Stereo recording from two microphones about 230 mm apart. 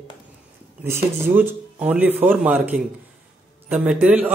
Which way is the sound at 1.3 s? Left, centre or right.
Centre.